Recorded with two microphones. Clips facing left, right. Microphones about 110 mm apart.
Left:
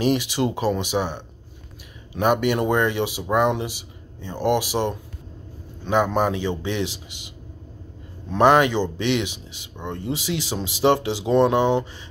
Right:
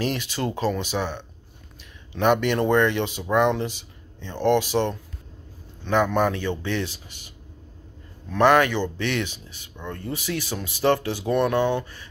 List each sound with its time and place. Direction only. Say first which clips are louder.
0.0 s speech: left 5 dB; 15° left (ahead or behind)